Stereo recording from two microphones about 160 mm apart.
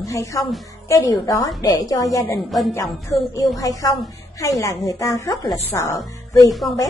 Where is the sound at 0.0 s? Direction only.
20° left (ahead or behind).